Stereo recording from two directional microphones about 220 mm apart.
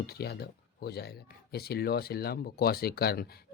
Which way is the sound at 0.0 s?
45° left (ahead or behind).